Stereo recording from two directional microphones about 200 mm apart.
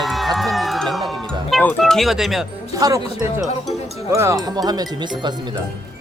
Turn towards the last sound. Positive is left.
turn(degrees=-20)  # may be behind; listen again after turning